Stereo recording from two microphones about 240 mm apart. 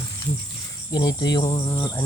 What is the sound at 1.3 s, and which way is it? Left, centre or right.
Insect, left.